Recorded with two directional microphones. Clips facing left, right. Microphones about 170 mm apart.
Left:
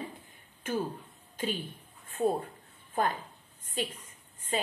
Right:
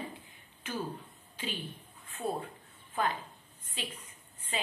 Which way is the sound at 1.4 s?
45° left (ahead or behind).